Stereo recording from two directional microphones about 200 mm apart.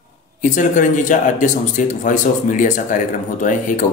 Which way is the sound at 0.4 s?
40° left (ahead or behind).